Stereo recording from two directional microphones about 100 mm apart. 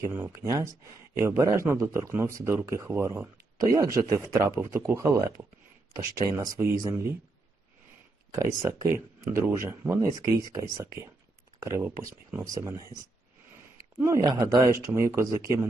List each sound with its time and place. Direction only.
0.0 s speech: 30° right (ahead or behind)
4.9 s speech: 25° right (ahead or behind)
6.0 s speech: 35° right (ahead or behind)
8.3 s speech: 30° right (ahead or behind)
14.0 s speech: 35° right (ahead or behind)